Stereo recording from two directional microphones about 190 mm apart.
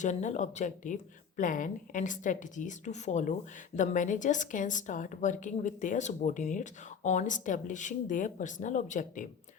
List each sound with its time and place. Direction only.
0.0 s a woman's voice: 40° left (ahead or behind)